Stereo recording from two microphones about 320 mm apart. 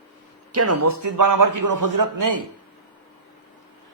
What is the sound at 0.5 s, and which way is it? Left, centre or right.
A man's voice, right.